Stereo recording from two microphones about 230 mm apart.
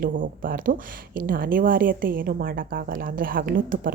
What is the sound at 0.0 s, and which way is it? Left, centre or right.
Speech, right.